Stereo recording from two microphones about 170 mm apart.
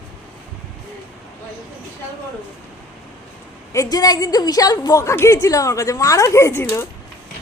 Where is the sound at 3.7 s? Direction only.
20° left (ahead or behind).